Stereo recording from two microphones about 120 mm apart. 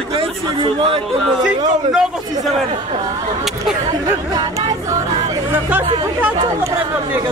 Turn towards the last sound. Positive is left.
turn(degrees=-15)  # may be behind; listen again after turning